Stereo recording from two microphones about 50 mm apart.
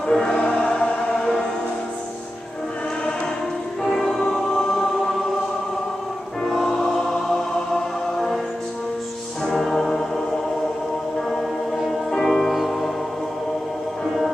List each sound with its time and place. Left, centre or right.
0.1 s music: centre
3.8 s music: centre
6.4 s music: centre
9.4 s music: centre
12.1 s music: centre